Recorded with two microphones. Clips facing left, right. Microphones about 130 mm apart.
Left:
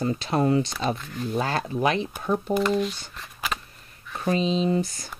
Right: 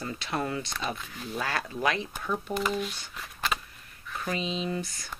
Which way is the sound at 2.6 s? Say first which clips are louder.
Left 7 dB; centre (ahead or behind).